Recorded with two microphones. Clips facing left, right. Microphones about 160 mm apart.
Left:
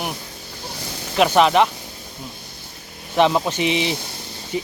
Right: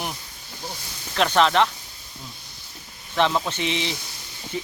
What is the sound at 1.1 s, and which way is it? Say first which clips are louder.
Speech: left 4 dB; 10° left (ahead or behind).